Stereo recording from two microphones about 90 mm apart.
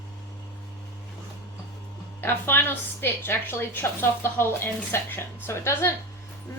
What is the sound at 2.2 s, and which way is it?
A woman's voice, 25° left (ahead or behind).